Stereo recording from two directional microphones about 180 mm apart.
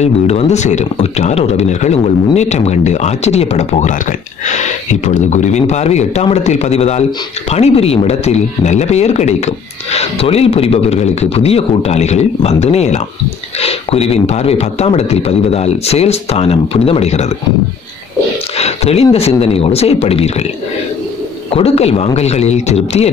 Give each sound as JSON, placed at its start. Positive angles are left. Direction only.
{"t": 0.0, "sound": "speech", "side_deg": 40}
{"t": 18.6, "sound": "a sound", "side_deg": 35}
{"t": 19.1, "sound": "speech", "side_deg": 35}
{"t": 21.5, "sound": "speech", "side_deg": 35}